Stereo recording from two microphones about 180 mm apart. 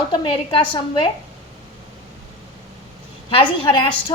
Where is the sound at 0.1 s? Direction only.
30° left (ahead or behind).